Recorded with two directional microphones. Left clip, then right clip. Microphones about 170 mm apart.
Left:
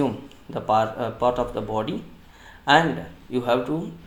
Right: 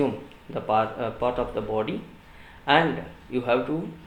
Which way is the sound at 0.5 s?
50° left (ahead or behind).